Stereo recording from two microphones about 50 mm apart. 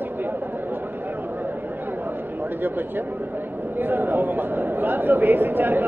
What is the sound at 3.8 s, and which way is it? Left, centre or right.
Speech, right.